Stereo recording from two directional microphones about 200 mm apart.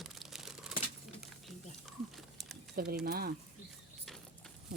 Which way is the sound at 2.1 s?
Centre (ahead or behind).